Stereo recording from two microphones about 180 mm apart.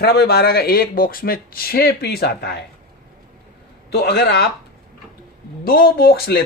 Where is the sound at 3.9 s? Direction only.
65° left (ahead or behind).